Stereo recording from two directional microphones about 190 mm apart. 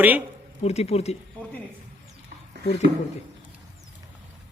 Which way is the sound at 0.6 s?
35° left (ahead or behind).